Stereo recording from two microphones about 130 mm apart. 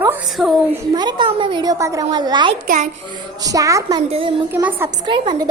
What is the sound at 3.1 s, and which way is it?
A woman's voice, 30° right (ahead or behind).